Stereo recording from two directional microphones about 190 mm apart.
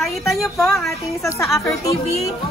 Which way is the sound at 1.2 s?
15° left (ahead or behind).